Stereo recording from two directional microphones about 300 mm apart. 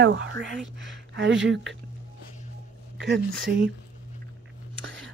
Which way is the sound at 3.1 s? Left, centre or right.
Right.